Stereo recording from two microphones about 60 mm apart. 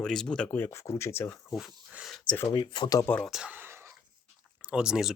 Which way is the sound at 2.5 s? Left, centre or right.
Left.